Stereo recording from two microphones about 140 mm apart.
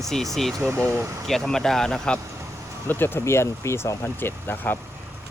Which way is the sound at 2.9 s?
15° left (ahead or behind).